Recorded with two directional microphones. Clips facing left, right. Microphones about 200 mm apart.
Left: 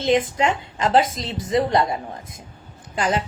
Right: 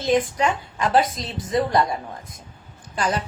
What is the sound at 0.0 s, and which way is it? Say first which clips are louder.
A woman's voice: left 1 dB; 25° left (ahead or behind).